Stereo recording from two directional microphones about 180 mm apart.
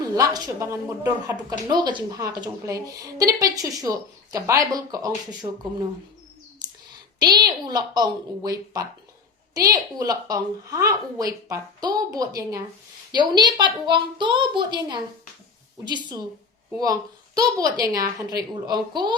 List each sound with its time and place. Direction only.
0.0 s a woman's voice: 20° right (ahead or behind)
7.2 s speech: 25° right (ahead or behind)